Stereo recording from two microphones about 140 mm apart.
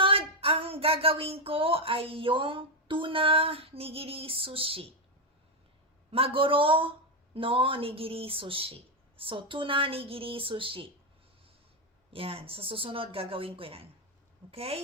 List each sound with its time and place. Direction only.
0.0 s a sound: 40° right (ahead or behind)
6.1 s speech: 40° right (ahead or behind)
12.1 s speech: 40° right (ahead or behind)